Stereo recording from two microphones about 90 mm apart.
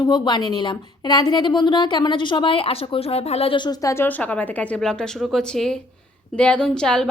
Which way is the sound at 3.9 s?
20° left (ahead or behind).